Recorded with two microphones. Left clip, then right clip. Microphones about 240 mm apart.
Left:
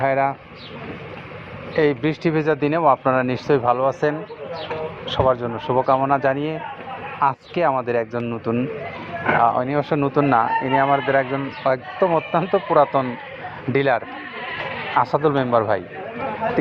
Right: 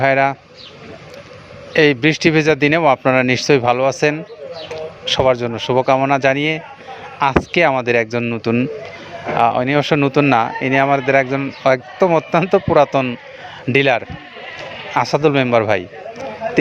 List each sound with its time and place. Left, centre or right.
0.0 s speech: right
1.7 s speech: right
11.0 s speech: right
11.3 s speech: right
14.9 s speech: right